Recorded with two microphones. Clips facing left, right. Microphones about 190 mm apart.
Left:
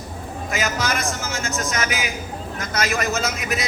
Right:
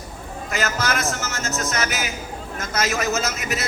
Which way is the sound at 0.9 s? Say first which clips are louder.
Even; centre (ahead or behind).